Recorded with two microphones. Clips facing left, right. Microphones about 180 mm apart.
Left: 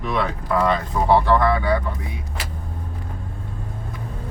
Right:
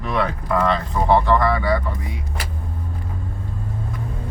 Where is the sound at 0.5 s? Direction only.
5° left (ahead or behind).